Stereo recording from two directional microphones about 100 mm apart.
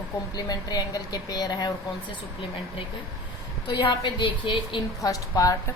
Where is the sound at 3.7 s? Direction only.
50° left (ahead or behind).